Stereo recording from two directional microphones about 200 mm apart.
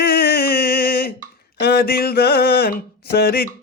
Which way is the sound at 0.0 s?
50° left (ahead or behind).